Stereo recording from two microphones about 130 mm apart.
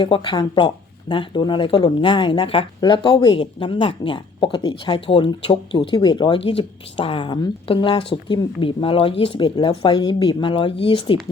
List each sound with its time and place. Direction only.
0.0 s speech: 40° left (ahead or behind)